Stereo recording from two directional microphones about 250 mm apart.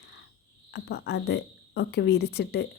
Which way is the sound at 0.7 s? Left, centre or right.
Left.